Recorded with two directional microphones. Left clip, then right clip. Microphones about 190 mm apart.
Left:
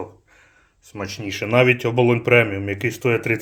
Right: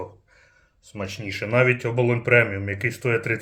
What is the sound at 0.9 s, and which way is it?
Speech, 25° left (ahead or behind).